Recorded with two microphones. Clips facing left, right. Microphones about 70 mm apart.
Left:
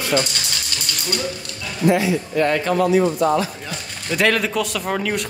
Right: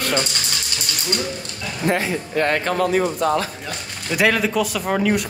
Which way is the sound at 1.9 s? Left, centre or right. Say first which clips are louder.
Left 4 dB; right.